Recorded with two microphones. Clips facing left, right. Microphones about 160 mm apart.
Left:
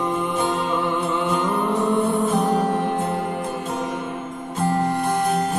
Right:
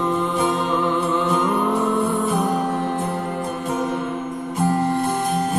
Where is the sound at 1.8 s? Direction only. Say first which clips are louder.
Left 1 dB; 20° left (ahead or behind).